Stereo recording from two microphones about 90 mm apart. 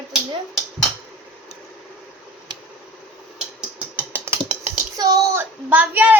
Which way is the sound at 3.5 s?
15° right (ahead or behind).